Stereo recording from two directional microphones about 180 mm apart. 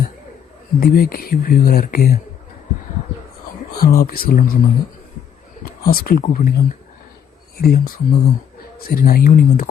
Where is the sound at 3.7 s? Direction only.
55° left (ahead or behind).